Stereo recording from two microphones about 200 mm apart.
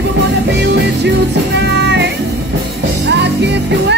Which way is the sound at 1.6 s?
60° right (ahead or behind).